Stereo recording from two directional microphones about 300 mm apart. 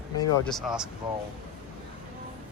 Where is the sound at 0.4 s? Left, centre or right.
Centre.